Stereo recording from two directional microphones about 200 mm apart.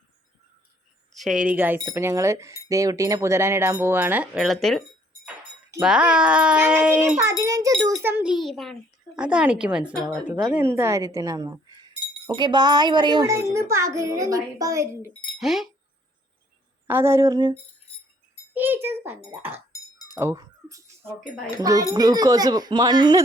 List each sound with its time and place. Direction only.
1.1 s speech: centre (ahead or behind)
5.8 s a child's voice: 5° right (ahead or behind)
7.4 s wind chime: 15° right (ahead or behind)
8.0 s a child's voice: 10° right (ahead or behind)
15.4 s a child's voice: centre (ahead or behind)
16.8 s speech: 10° right (ahead or behind)
19.7 s chink: 15° left (ahead or behind)
20.1 s chink: 15° right (ahead or behind)
21.6 s speech: 15° right (ahead or behind)